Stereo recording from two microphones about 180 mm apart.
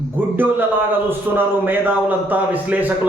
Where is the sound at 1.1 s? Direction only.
10° right (ahead or behind).